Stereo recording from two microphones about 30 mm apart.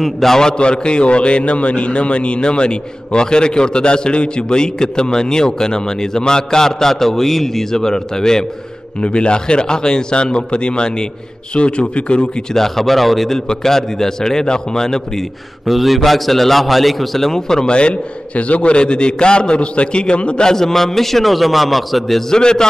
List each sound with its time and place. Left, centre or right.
0.0 s a man's voice: centre
0.6 s a man's voice: left
9.0 s a man's voice: left
12.5 s a man's voice: centre
15.6 s a man's voice: centre
17.3 s speech: centre
17.6 s a man's voice: left
18.3 s a man's voice: left
20.4 s a man's voice: centre
22.3 s speech: left